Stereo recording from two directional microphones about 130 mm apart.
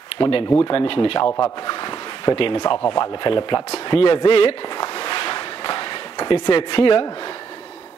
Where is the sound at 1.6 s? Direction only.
35° left (ahead or behind).